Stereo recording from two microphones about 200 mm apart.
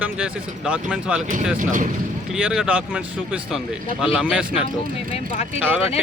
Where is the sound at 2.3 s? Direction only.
5° right (ahead or behind).